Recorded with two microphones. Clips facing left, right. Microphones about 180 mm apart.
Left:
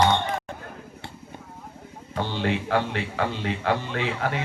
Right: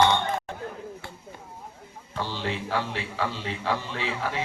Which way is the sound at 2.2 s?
60° left (ahead or behind).